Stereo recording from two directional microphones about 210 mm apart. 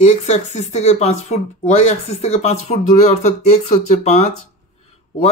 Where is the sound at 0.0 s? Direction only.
30° left (ahead or behind).